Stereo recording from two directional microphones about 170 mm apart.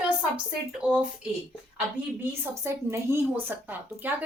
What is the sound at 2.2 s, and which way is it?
A woman's voice, 15° right (ahead or behind).